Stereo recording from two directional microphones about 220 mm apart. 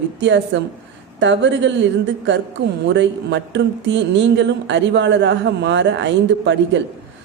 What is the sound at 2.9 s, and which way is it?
Speech, 55° right (ahead or behind).